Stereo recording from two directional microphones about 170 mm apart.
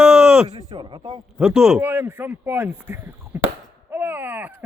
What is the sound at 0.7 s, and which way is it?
Speech, 25° right (ahead or behind).